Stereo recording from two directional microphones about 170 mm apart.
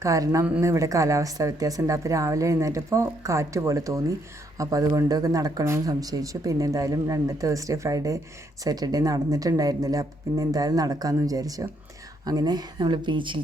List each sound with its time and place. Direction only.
0.0 s speech: 20° right (ahead or behind)